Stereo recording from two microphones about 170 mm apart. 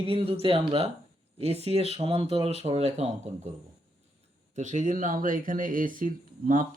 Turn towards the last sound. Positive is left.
turn(degrees=-50)  # may be behind; listen again after turning